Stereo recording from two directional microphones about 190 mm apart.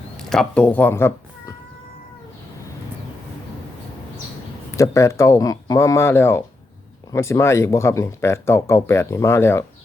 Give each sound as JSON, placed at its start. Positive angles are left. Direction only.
{"t": 0.2, "sound": "speech", "side_deg": 0}
{"t": 4.8, "sound": "speech", "side_deg": 15}